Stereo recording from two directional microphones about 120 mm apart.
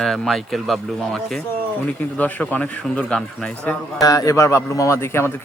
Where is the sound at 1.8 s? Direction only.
15° left (ahead or behind).